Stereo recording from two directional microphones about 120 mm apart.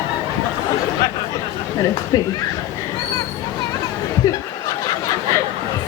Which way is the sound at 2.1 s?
30° left (ahead or behind).